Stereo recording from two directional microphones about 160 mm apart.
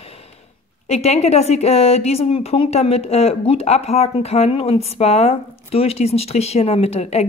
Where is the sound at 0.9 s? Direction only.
40° left (ahead or behind).